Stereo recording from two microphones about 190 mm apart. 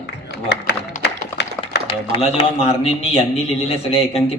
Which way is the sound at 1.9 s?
30° left (ahead or behind).